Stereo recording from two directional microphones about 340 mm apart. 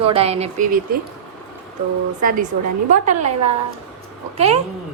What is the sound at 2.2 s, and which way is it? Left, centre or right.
A woman's voice, right.